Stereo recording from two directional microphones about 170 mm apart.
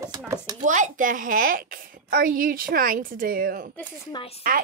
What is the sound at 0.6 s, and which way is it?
A woman's voice, 45° right (ahead or behind).